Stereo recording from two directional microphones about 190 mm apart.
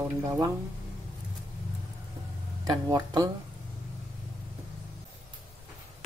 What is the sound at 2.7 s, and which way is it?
Speech, 20° right (ahead or behind).